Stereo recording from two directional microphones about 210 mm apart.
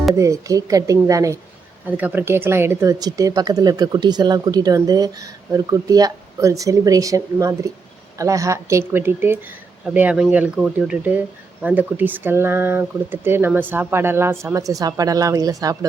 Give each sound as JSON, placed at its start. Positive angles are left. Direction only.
{"t": 0.1, "sound": "speech", "side_deg": -15}